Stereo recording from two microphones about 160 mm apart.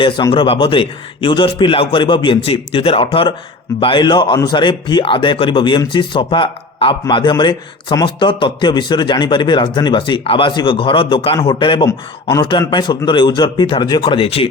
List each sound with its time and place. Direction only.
0.0 s a man's voice: 30° left (ahead or behind)